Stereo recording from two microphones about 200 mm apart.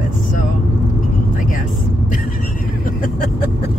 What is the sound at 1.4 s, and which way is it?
Vehicle, 40° left (ahead or behind).